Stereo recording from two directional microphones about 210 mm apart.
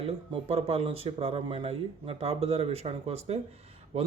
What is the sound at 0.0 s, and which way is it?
Speech, 30° right (ahead or behind).